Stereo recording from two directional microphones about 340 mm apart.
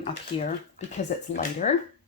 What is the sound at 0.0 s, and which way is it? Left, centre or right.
Speech, centre.